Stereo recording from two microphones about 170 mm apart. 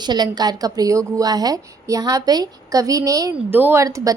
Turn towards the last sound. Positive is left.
turn(degrees=-20)  # may be behind; listen again after turning